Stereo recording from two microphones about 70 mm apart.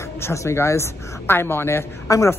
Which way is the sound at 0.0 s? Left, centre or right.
Left.